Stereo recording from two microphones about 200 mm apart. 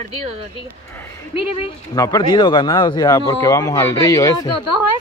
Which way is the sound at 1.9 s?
20° left (ahead or behind).